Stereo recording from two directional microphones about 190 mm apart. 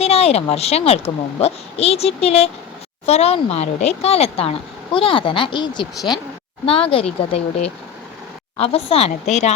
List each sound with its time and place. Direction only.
0.0 s speech: 30° left (ahead or behind)